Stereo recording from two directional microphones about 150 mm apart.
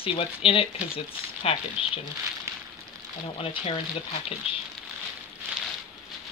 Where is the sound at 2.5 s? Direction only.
20° right (ahead or behind).